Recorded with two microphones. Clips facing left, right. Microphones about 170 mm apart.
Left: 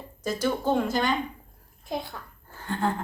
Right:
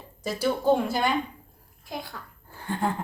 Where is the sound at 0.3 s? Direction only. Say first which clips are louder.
Right 3 dB; 10° right (ahead or behind).